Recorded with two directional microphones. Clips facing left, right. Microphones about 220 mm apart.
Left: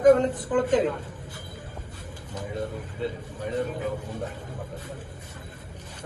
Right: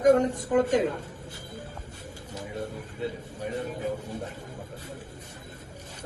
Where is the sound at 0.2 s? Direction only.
45° right (ahead or behind).